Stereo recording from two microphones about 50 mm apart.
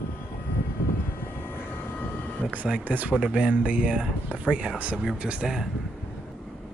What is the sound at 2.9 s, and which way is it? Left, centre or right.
Speech, right.